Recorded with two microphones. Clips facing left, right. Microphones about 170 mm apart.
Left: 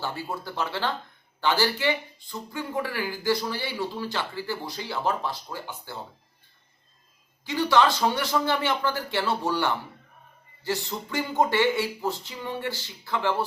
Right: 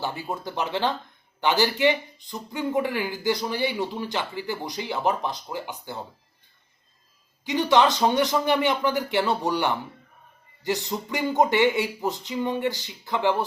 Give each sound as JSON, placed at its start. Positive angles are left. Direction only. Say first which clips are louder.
{"t": 0.0, "sound": "speech", "louder": "right 2 dB", "side_deg": -15}
{"t": 7.4, "sound": "speech", "louder": "right 2 dB", "side_deg": -20}